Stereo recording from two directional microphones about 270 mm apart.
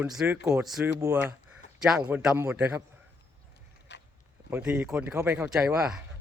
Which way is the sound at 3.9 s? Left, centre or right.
Left.